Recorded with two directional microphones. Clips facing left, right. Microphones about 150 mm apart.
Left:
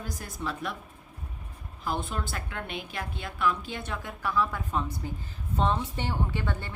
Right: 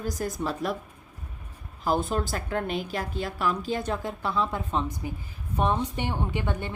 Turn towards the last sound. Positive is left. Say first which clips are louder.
# right 3 dB
turn(degrees=-20)  # may be behind; listen again after turning